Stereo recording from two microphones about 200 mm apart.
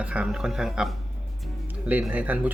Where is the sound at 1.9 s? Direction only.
10° right (ahead or behind).